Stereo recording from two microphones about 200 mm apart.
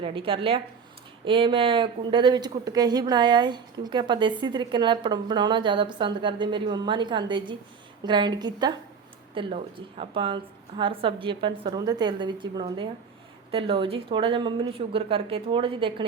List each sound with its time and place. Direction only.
0.0 s a woman's voice: 25° right (ahead or behind)